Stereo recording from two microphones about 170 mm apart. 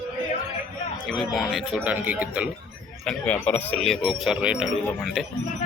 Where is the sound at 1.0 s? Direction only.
Centre (ahead or behind).